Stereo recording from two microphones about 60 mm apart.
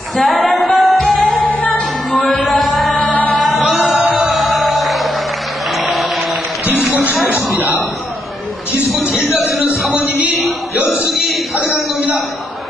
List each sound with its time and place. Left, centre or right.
0.2 s music: centre
1.5 s music: left
2.1 s a sound: centre
3.2 s music: centre
5.8 s a sound: centre
6.7 s music: centre
9.0 s music: centre
10.8 s music: right
11.0 s a sound: centre